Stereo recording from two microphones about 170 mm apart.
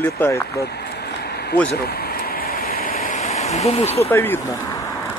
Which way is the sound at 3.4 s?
40° left (ahead or behind).